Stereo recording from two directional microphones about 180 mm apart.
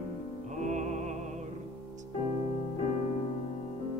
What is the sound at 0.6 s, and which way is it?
Music, 40° right (ahead or behind).